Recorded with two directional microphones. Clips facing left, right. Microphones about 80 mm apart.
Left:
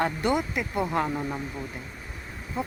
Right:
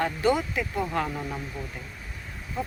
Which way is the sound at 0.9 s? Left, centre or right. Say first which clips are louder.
Left 2 dB; centre.